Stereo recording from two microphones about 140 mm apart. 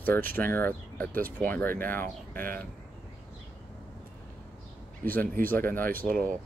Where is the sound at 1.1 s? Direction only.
85° right.